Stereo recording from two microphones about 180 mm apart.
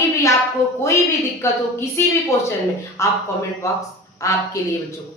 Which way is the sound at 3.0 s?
15° left (ahead or behind).